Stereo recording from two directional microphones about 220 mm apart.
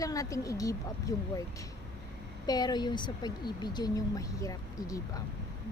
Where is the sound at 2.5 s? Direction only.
20° left (ahead or behind).